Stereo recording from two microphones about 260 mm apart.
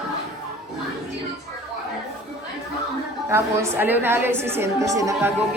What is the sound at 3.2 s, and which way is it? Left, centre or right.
A woman's voice, centre.